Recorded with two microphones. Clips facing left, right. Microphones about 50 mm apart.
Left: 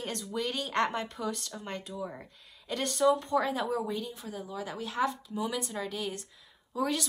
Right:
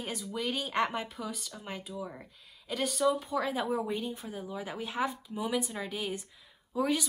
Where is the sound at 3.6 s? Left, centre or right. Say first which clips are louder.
Even; centre.